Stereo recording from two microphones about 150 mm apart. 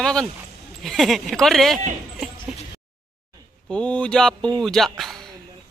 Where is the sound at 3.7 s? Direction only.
5° left (ahead or behind).